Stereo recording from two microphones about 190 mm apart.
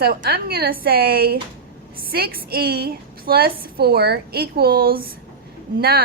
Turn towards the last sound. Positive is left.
turn(degrees=-55)  # may be behind; listen again after turning